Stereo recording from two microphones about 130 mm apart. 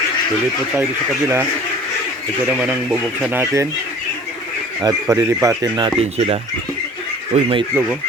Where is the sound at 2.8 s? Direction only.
Centre (ahead or behind).